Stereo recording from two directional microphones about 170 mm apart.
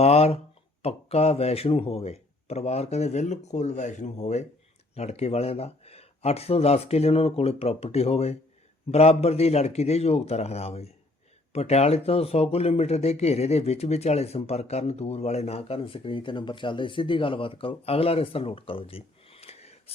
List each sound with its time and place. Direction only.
0.0 s speech: 40° left (ahead or behind)